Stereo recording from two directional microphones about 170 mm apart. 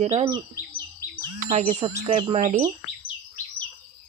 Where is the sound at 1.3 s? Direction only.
50° right (ahead or behind).